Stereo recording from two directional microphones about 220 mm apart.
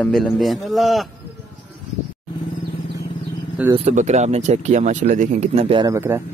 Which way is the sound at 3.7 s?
30° right (ahead or behind).